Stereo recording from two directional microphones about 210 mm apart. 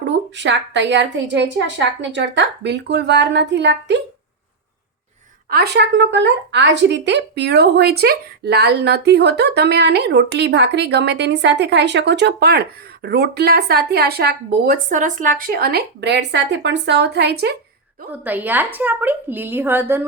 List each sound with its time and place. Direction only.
0.1 s a woman's voice: 60° right (ahead or behind)
5.5 s speech: 50° right (ahead or behind)
18.1 s a woman's voice: 10° right (ahead or behind)